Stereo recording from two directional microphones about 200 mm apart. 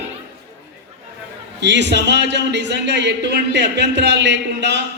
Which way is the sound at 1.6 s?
60° right (ahead or behind).